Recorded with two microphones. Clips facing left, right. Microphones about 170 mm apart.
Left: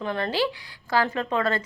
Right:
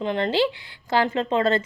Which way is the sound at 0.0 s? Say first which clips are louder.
Right 4 dB; 20° right (ahead or behind).